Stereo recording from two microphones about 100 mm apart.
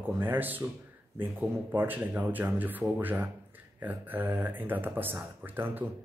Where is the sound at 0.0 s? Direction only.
20° right (ahead or behind).